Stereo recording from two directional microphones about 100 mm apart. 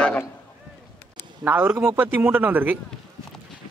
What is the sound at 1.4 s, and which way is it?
Speech, 20° right (ahead or behind).